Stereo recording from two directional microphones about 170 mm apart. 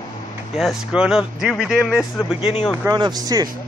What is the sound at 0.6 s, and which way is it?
Speech, centre (ahead or behind).